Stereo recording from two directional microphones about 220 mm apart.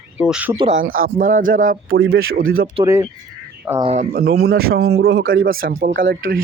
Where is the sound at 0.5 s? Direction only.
25° right (ahead or behind).